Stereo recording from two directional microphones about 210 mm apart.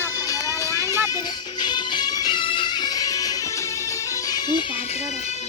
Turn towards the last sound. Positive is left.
turn(degrees=20)  # may be behind; listen again after turning